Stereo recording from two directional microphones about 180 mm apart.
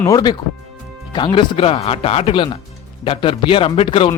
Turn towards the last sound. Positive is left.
turn(degrees=30)  # may be behind; listen again after turning